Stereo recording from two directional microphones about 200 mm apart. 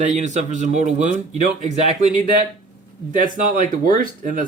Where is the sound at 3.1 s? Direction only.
40° right (ahead or behind).